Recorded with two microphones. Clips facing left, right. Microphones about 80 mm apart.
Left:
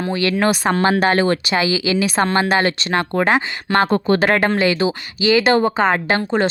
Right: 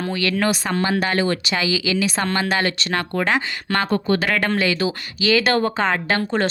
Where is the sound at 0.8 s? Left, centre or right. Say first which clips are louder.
Left 5 dB; left.